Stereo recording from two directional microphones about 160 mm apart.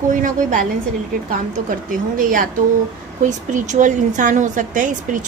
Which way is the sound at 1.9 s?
60° right (ahead or behind).